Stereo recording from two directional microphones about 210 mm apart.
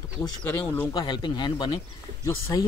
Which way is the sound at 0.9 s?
20° left (ahead or behind).